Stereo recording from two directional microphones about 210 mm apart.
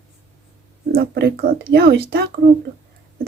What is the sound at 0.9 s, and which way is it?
Speech, 45° right (ahead or behind).